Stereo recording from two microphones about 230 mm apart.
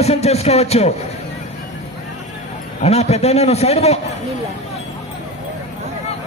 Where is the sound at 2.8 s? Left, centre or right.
Left.